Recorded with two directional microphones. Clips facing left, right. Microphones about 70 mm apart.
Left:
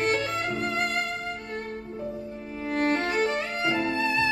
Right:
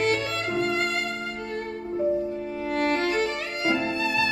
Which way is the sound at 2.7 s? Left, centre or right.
Left.